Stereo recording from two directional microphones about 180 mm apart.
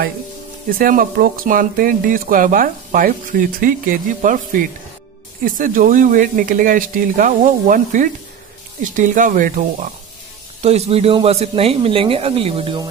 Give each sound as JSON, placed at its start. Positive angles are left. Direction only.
{"t": 0.7, "sound": "speech", "side_deg": -50}
{"t": 10.6, "sound": "speech", "side_deg": -35}